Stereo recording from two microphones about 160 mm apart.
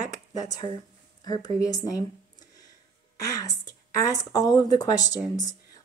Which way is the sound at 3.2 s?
20° left (ahead or behind).